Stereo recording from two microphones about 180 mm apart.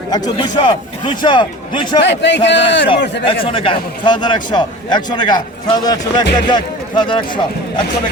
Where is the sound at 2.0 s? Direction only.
75° left (ahead or behind).